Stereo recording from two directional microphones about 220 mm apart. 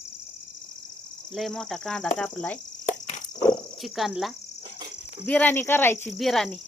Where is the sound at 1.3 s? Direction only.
Centre (ahead or behind).